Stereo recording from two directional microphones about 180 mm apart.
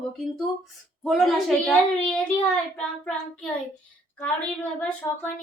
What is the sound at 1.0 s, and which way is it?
A woman's voice, centre (ahead or behind).